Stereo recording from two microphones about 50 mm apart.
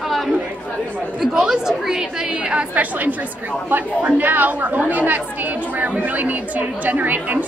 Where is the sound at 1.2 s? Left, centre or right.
Centre.